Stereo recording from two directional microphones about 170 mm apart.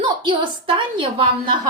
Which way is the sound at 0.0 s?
30° right (ahead or behind).